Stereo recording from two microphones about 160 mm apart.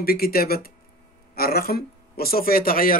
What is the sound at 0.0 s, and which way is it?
Speech, 70° left (ahead or behind).